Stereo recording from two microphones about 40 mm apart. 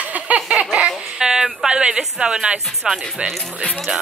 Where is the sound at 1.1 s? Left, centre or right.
Centre.